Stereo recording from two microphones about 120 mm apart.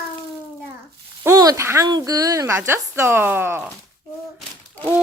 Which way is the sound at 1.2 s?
30° right (ahead or behind).